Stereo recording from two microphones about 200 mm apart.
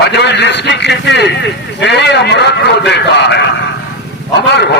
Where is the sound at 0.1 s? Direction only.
60° left (ahead or behind).